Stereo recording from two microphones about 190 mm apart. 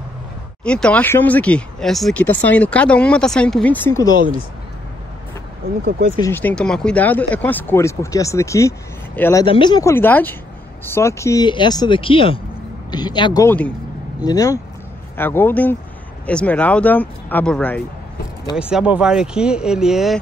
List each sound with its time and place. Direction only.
0.7 s speech: 5° left (ahead or behind)
4.1 s speech: 45° right (ahead or behind)
5.9 s speech: 50° right (ahead or behind)
6.2 s speech: 10° left (ahead or behind)
9.4 s speech: 25° left (ahead or behind); by 17.8 s 5° left (ahead or behind)
18.6 s speech: 5° right (ahead or behind)